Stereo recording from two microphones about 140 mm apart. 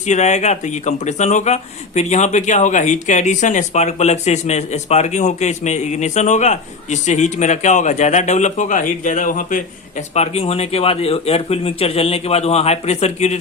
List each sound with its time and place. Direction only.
0.1 s speech: 55° left (ahead or behind)
10.2 s a man's voice: 45° left (ahead or behind)